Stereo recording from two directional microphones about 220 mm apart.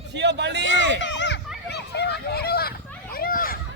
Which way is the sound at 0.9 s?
55° left (ahead or behind).